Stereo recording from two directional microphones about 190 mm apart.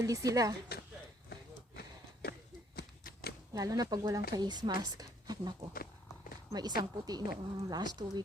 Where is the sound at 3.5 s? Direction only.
20° right (ahead or behind).